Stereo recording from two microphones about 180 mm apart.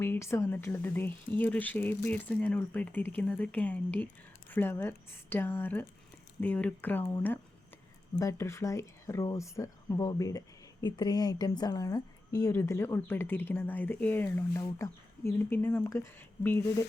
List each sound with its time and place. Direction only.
0.0 s speech: 15° left (ahead or behind)